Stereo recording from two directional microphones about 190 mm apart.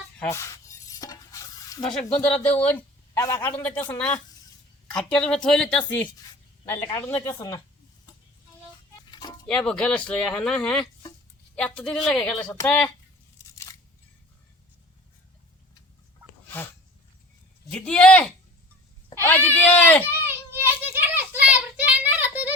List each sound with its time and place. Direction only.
0.2 s speech: 15° left (ahead or behind)
0.9 s stir: 20° left (ahead or behind)
1.8 s a man's voice: 5° left (ahead or behind)
9.0 s music: 20° left (ahead or behind)
9.5 s speech: 5° left (ahead or behind)
17.7 s speech: 5° left (ahead or behind)
19.1 s a sound: 10° left (ahead or behind)
19.5 s a man's voice: 10° left (ahead or behind)
20.1 s child singing: 10° right (ahead or behind)